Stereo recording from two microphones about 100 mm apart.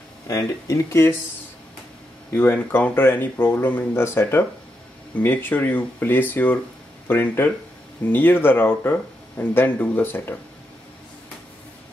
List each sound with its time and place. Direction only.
0.3 s speech: 35° left (ahead or behind)
2.3 s speech: 20° left (ahead or behind)